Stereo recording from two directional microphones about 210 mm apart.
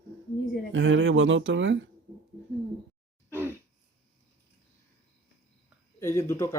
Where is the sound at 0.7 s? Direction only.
65° right (ahead or behind).